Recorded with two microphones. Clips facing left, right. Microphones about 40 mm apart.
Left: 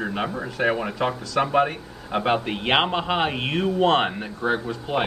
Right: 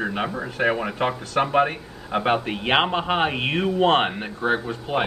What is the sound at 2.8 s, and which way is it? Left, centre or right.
Speech, centre.